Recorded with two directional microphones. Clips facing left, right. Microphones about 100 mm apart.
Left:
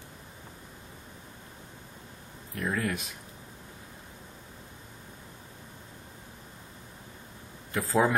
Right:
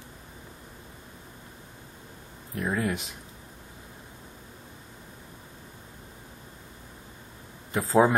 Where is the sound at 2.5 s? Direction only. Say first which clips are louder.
Right 2 dB; 20° right (ahead or behind).